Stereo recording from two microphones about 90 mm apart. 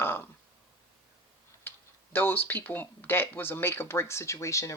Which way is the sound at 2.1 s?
25° left (ahead or behind).